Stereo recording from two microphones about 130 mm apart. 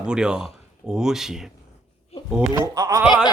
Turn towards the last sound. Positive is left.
turn(degrees=-20)  # may be behind; listen again after turning